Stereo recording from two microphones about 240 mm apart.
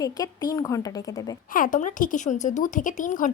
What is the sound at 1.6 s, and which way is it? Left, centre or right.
A woman's voice, left.